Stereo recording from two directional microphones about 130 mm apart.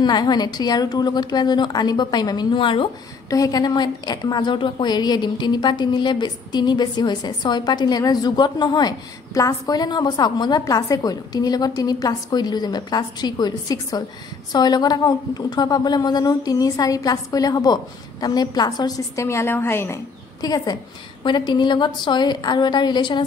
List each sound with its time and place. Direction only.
0.0 s a woman's voice: 35° left (ahead or behind)
3.3 s a woman's voice: 25° left (ahead or behind)
20.4 s a woman's voice: 30° left (ahead or behind)